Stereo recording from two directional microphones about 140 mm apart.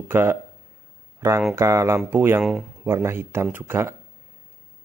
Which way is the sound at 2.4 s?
5° right (ahead or behind).